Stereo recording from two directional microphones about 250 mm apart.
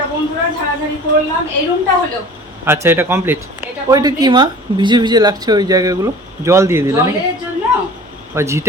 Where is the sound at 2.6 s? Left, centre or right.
Centre.